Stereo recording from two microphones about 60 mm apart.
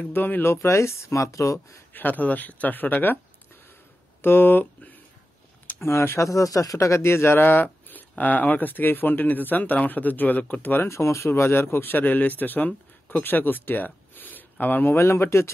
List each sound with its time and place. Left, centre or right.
0.1 s speech: left
0.5 s speech: left
2.0 s speech: left
4.2 s speech: left
5.8 s speech: left
10.9 s speech: left
15.0 s speech: left